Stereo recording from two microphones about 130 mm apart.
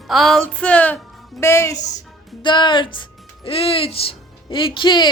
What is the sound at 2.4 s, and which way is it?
Speech, 40° left (ahead or behind).